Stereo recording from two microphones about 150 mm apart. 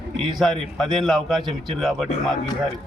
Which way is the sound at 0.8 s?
Centre (ahead or behind).